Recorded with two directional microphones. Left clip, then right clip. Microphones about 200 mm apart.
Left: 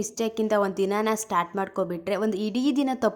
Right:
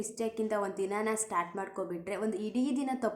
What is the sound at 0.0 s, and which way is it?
A woman's voice, 45° left (ahead or behind).